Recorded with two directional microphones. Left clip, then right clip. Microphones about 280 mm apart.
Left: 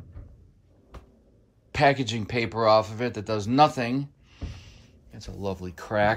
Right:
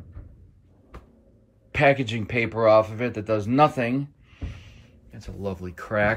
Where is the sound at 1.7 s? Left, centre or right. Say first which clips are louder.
Right 2 dB; centre.